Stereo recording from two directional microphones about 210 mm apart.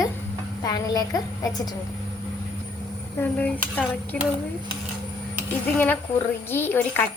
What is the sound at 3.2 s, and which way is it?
Speech, 5° left (ahead or behind).